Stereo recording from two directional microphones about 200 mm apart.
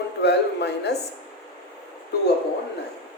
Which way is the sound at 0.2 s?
55° left (ahead or behind).